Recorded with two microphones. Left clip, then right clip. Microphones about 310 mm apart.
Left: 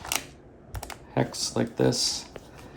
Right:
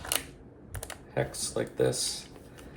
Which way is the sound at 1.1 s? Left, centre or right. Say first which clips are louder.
Left 4 dB; left.